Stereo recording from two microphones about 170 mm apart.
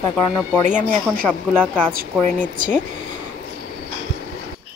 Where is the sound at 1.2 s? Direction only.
5° left (ahead or behind).